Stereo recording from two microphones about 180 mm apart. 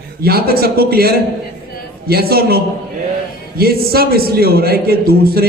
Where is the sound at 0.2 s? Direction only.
60° right (ahead or behind).